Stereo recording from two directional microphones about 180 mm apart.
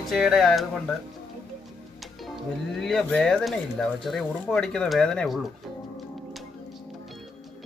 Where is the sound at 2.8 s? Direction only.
Centre (ahead or behind).